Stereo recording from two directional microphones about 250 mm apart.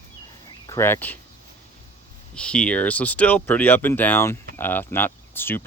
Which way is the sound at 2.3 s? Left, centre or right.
Centre.